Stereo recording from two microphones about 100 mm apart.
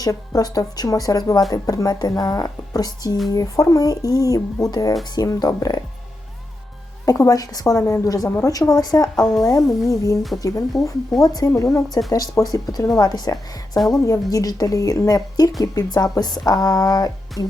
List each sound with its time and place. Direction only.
0.0 s speech: 40° left (ahead or behind)
7.0 s speech: 35° left (ahead or behind)
13.7 s a woman's voice: centre (ahead or behind)
14.0 s speech: 35° left (ahead or behind)